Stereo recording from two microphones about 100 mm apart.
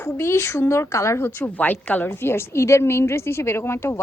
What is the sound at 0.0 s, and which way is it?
Speech, 25° left (ahead or behind).